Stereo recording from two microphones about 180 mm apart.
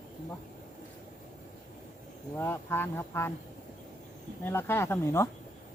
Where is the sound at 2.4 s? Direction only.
15° left (ahead or behind).